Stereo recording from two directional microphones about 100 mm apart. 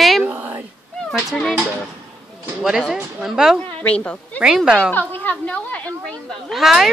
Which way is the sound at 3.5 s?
10° left (ahead or behind).